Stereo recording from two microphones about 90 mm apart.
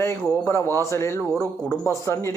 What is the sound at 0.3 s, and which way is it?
A man's voice, 35° left (ahead or behind).